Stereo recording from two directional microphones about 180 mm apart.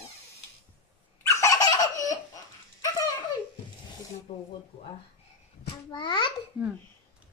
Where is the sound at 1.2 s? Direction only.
15° left (ahead or behind).